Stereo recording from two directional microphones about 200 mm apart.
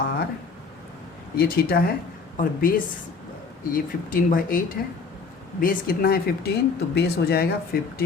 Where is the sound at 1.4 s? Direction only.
50° left (ahead or behind).